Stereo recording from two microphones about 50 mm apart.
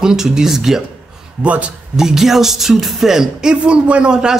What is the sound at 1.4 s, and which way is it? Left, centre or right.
Speech, right.